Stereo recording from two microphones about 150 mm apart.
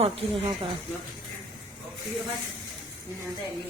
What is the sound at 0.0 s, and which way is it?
Speech, 40° right (ahead or behind).